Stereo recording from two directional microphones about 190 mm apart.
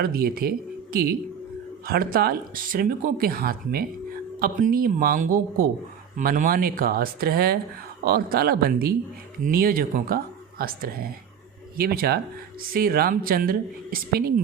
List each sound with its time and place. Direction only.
0.0 s speech: 50° right (ahead or behind)
1.9 s speech: 50° right (ahead or behind)